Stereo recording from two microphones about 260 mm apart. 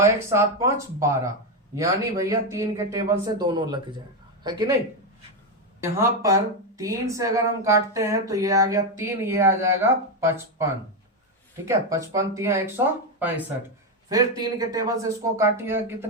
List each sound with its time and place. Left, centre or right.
0.0 s speech: centre
5.8 s speech: centre